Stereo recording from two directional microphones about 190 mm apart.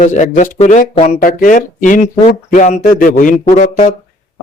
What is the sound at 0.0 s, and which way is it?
Speech, 40° left (ahead or behind).